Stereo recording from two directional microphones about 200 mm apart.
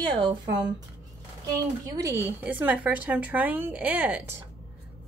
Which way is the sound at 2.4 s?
5° right (ahead or behind).